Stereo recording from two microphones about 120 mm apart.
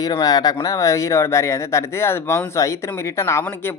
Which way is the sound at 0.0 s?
30° left (ahead or behind).